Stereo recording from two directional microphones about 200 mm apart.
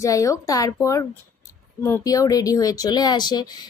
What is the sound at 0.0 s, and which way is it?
Speech, 15° left (ahead or behind).